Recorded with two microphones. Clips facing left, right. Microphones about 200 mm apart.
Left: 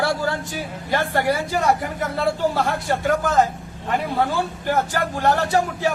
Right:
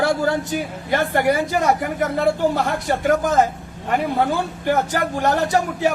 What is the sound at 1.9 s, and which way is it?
Speech, 50° right (ahead or behind).